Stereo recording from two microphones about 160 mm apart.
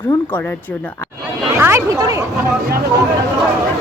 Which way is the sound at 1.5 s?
15° right (ahead or behind).